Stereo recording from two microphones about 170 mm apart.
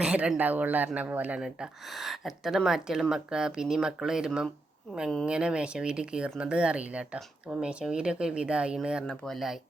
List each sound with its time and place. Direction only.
0.0 s speech: 5° right (ahead or behind)